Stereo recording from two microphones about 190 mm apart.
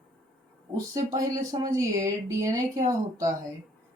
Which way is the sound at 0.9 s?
20° right (ahead or behind).